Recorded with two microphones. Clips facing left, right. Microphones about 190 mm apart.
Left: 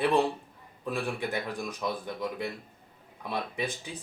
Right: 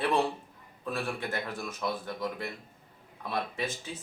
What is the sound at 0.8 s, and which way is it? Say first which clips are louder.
Speech: left 2 dB; 15° left (ahead or behind).